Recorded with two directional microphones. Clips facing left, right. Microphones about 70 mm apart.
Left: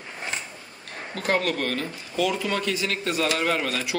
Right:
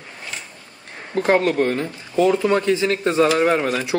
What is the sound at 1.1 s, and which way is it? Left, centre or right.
Speech, right.